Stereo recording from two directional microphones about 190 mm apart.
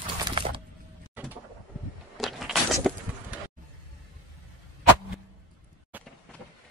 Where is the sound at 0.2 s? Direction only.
25° right (ahead or behind).